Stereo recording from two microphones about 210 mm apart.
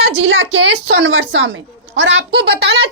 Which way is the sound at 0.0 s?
60° right (ahead or behind).